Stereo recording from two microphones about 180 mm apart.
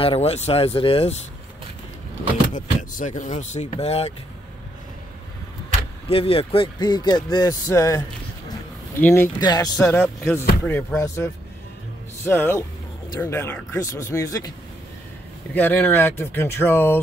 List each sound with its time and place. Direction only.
0.0 s speech: 35° left (ahead or behind)
2.5 s speech: 45° left (ahead or behind)
6.0 s speech: 30° left (ahead or behind); by 8.0 s 15° left (ahead or behind)
9.0 s speech: 10° left (ahead or behind)
9.4 s speech: 20° left (ahead or behind)
9.8 s speech: 10° left (ahead or behind)
12.3 s speech: 10° left (ahead or behind)
15.5 s speech: 10° left (ahead or behind)